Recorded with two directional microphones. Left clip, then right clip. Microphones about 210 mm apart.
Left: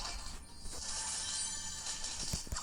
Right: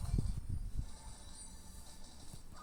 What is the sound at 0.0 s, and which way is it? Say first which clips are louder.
Music: left 6 dB; 45° left (ahead or behind).